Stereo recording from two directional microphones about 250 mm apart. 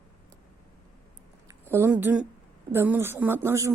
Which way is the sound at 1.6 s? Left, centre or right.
Centre.